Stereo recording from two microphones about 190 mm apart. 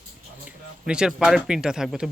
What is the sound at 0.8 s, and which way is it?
Speech, 5° right (ahead or behind).